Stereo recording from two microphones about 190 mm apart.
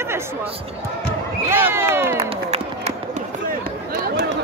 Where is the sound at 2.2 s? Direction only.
35° right (ahead or behind).